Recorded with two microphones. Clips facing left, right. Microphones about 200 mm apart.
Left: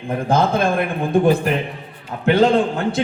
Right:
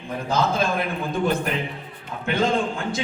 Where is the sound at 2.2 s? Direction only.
70° left (ahead or behind).